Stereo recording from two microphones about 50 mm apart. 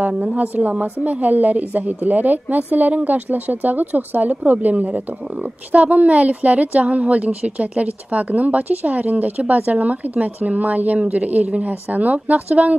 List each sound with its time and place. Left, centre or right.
0.1 s a woman's voice: centre
0.4 s a woman's voice: right